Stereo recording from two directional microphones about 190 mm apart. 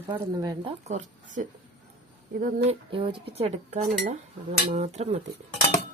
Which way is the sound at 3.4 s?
40° right (ahead or behind).